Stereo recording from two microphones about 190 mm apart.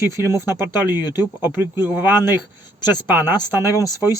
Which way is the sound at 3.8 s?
15° right (ahead or behind).